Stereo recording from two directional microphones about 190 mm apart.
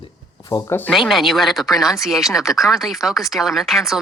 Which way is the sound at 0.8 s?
Centre (ahead or behind).